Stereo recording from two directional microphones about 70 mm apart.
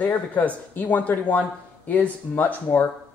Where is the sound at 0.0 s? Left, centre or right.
Left.